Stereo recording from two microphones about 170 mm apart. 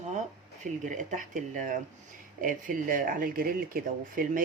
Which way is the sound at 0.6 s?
45° right (ahead or behind).